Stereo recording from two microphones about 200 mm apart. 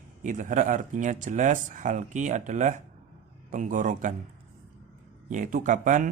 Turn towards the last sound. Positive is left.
turn(degrees=-40)  # may be behind; listen again after turning